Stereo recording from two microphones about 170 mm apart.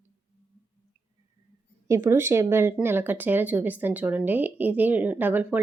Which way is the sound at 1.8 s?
15° right (ahead or behind).